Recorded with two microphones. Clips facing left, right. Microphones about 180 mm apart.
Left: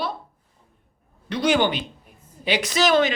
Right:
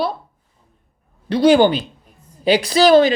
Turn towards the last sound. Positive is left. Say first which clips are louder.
# right 8 dB
turn(degrees=-35)  # may be behind; listen again after turning